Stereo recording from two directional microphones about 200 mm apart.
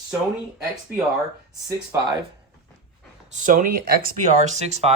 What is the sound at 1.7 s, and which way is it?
Speech, 20° right (ahead or behind).